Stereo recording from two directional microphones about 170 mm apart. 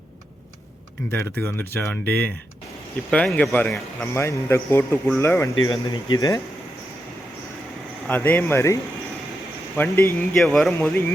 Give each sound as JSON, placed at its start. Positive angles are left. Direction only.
{"t": 1.1, "sound": "speech", "side_deg": 10}
{"t": 8.0, "sound": "speech", "side_deg": 10}
{"t": 10.4, "sound": "speech", "side_deg": 0}